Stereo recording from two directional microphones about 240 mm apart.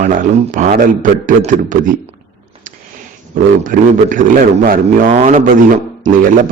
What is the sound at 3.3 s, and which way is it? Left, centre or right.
Speech, right.